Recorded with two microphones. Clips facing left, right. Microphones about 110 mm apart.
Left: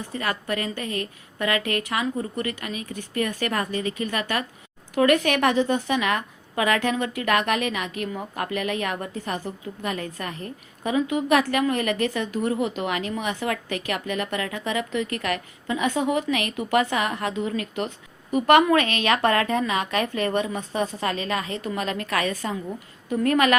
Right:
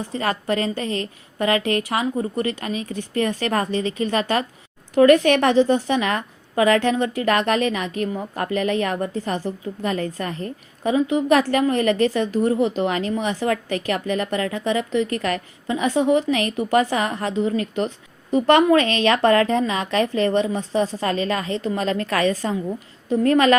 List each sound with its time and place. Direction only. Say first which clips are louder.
0.2 s a woman's voice: right 5 dB; 35° right (ahead or behind)